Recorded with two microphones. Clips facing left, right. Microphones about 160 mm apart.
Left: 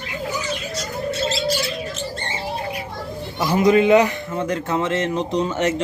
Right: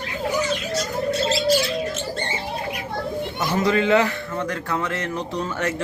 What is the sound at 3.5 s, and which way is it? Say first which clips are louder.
Speech: left 5 dB; 15° left (ahead or behind).